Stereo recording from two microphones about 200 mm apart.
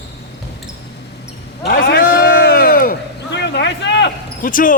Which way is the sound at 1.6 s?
50° left (ahead or behind).